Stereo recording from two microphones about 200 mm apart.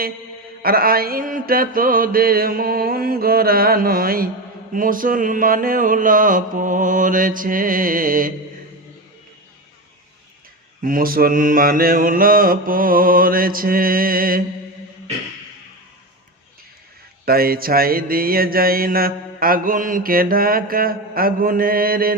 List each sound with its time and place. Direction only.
0.6 s mantra: 50° right (ahead or behind)
10.8 s mantra: 45° right (ahead or behind)
17.2 s mantra: 50° right (ahead or behind)